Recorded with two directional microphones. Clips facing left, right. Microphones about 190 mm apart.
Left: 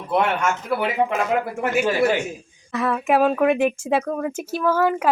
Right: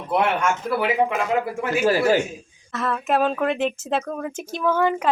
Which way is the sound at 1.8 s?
35° right (ahead or behind).